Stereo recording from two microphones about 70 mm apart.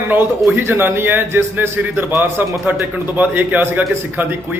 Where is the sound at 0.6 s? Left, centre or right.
Right.